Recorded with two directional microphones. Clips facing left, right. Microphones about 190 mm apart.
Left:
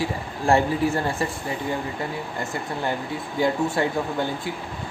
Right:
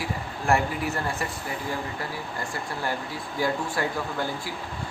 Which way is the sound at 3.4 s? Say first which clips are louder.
Left 5 dB; 20° left (ahead or behind).